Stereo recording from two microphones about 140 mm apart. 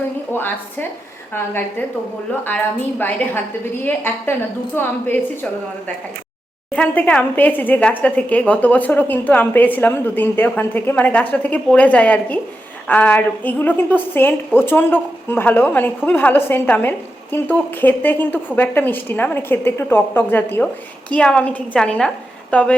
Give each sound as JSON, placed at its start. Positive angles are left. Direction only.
{"t": 0.3, "sound": "a woman's voice", "side_deg": 15}
{"t": 3.8, "sound": "a woman's voice", "side_deg": 15}
{"t": 6.7, "sound": "a woman's voice", "side_deg": 10}